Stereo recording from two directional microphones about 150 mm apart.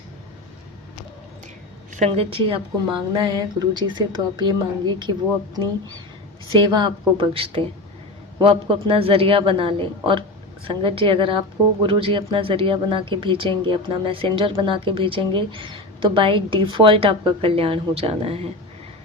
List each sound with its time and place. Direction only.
2.0 s a woman's voice: 40° right (ahead or behind)
6.5 s speech: 30° right (ahead or behind)